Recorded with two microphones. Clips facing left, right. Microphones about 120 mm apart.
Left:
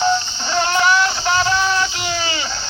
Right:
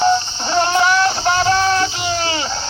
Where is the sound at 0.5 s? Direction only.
35° right (ahead or behind).